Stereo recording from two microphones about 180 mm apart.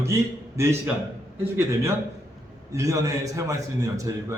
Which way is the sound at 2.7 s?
20° right (ahead or behind).